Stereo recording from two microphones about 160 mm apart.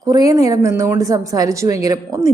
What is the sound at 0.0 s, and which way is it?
A woman's voice, 20° right (ahead or behind).